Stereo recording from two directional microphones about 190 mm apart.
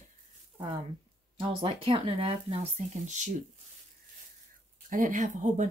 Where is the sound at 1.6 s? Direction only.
30° right (ahead or behind).